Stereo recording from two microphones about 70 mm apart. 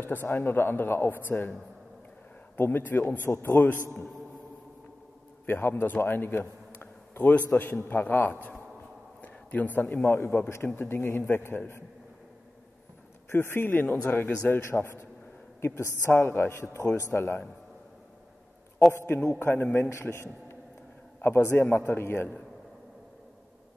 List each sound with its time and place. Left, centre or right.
0.0 s speech: left
2.5 s a man's voice: left
5.5 s a man's voice: left
9.2 s a sound: left
10.0 s speech: left
13.3 s a man's voice: left
14.6 s speech: left
19.4 s a man's voice: left
19.9 s a man's voice: left